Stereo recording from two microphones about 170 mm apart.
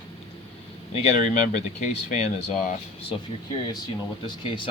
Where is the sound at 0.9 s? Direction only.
40° left (ahead or behind).